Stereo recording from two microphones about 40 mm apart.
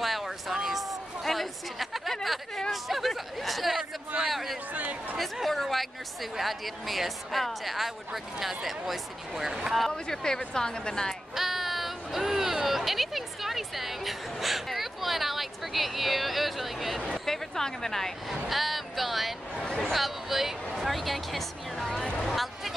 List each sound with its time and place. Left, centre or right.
0.0 s a sound: centre
2.2 s speech: centre
4.7 s speech: right
5.1 s speech: centre
10.0 s a woman's voice: centre
11.3 s a sound: centre
17.3 s a woman's voice: centre
18.3 s speech: centre
20.8 s a sound: centre